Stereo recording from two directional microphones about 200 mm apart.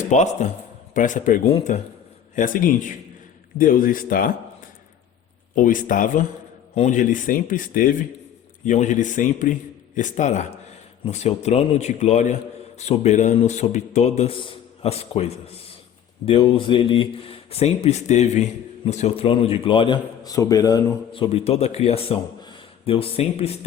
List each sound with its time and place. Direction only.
0.1 s a man's voice: 35° left (ahead or behind)
5.5 s a man's voice: 40° left (ahead or behind)